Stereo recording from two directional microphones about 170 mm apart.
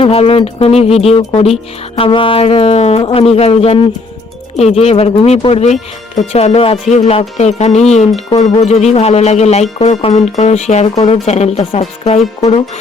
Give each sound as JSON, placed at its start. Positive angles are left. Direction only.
{"t": 0.0, "sound": "speech", "side_deg": 35}